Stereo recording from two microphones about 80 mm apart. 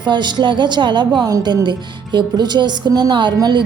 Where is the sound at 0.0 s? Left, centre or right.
Right.